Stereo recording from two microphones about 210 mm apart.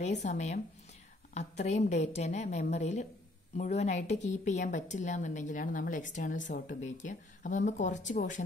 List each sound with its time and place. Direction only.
0.0 s a woman's voice: 35° left (ahead or behind)